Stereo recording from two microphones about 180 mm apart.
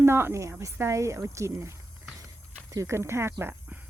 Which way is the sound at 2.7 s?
15° right (ahead or behind).